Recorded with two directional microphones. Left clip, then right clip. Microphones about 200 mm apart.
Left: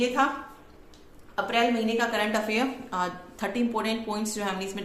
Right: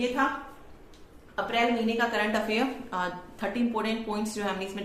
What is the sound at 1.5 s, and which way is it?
A woman's voice, 20° left (ahead or behind).